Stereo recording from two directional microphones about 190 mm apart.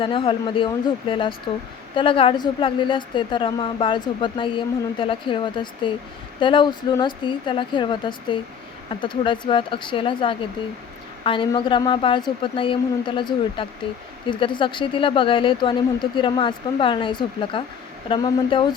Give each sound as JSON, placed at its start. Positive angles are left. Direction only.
{"t": 0.0, "sound": "a woman's voice", "side_deg": 30}